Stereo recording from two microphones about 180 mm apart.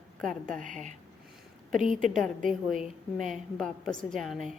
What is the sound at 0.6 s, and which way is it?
Speech, 45° right (ahead or behind).